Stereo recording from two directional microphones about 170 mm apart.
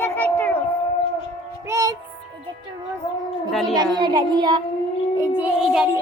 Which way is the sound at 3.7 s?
25° right (ahead or behind).